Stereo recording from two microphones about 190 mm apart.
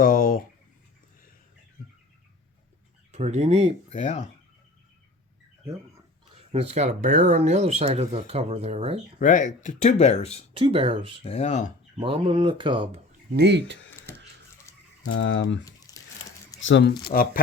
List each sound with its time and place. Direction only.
0.0 s a sound: 45° left (ahead or behind)
3.1 s speech: 35° right (ahead or behind)
3.8 s speech: 35° left (ahead or behind)
6.5 s speech: 35° right (ahead or behind)
9.1 s speech: 40° left (ahead or behind)
10.6 s speech: 30° right (ahead or behind)
11.2 s speech: 35° left (ahead or behind)
11.9 s speech: 25° right (ahead or behind)
13.3 s speech: 60° right (ahead or behind)
15.0 s speech: 85° left
15.9 s a sound: 20° left (ahead or behind)
16.6 s speech: 75° left (ahead or behind)
17.1 s speech: 50° left (ahead or behind)